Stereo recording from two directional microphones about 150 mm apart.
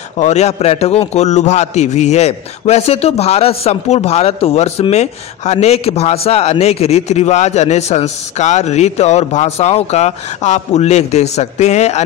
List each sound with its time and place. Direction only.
0.2 s a man's voice: 45° left (ahead or behind)